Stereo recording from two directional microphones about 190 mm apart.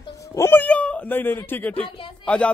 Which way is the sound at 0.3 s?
15° left (ahead or behind).